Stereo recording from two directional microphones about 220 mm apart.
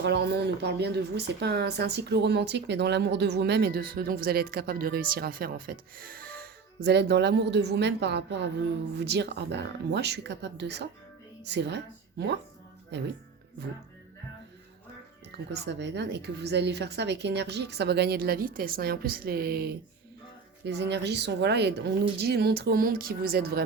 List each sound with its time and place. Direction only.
0.0 s a woman's voice: 50° right (ahead or behind)
15.6 s a woman's voice: 50° right (ahead or behind)